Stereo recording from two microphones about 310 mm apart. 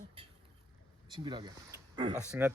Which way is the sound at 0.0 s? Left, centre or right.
Centre.